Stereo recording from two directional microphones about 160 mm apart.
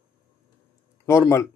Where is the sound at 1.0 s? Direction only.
20° left (ahead or behind).